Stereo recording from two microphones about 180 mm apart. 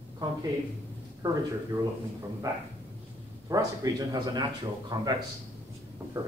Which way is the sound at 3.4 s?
20° right (ahead or behind).